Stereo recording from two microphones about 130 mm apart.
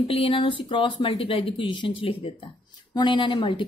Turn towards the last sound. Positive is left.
turn(degrees=40)  # may be behind; listen again after turning